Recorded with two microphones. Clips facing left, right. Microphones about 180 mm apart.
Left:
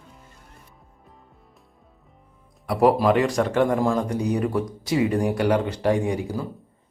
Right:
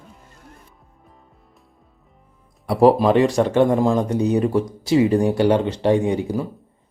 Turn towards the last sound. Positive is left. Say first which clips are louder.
# right 4 dB
turn(degrees=-20)  # may be behind; listen again after turning